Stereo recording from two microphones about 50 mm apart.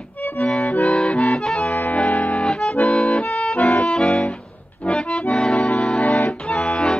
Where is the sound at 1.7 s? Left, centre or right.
Left.